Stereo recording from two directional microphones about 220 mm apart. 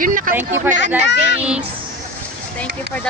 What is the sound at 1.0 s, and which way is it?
Speech, 50° left (ahead or behind).